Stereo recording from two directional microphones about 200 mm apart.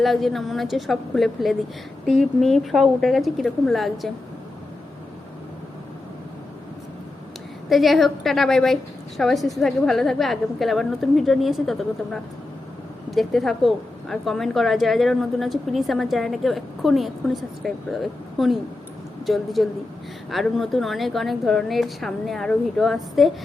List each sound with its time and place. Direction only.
0.0 s a woman's voice: centre (ahead or behind)
7.7 s a woman's voice: centre (ahead or behind)